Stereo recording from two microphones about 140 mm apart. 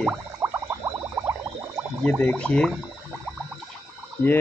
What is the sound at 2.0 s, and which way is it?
Speech, 10° left (ahead or behind).